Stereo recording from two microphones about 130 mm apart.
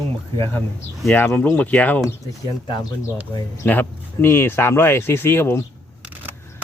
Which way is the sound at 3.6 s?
15° left (ahead or behind).